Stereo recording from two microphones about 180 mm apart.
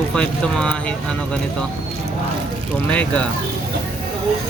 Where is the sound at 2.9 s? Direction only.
5° left (ahead or behind).